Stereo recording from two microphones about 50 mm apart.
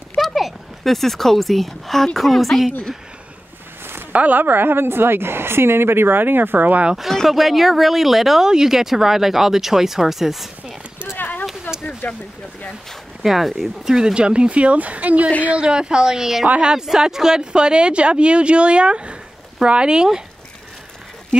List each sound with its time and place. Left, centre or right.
0.2 s speech: centre
4.1 s a woman's voice: right
7.0 s speech: centre
11.1 s a sound: left
12.0 s speech: left
13.2 s a woman's voice: centre
16.4 s a woman's voice: centre